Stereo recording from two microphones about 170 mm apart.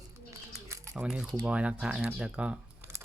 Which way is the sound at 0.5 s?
15° right (ahead or behind).